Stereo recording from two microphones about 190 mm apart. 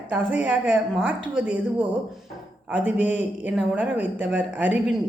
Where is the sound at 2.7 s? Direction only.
10° right (ahead or behind).